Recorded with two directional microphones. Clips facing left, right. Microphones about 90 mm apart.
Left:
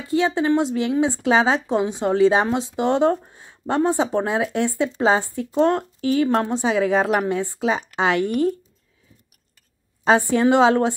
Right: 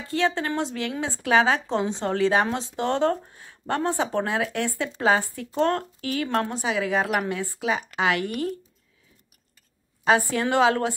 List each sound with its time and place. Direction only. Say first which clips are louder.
0.1 s a woman's voice: left 6 dB; 15° left (ahead or behind)
10.0 s a woman's voice: left 5 dB; 25° left (ahead or behind)